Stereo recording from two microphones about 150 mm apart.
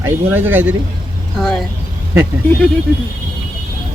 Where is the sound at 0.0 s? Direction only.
15° right (ahead or behind).